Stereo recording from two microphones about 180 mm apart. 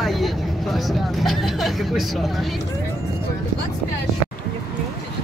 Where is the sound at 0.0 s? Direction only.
Centre (ahead or behind).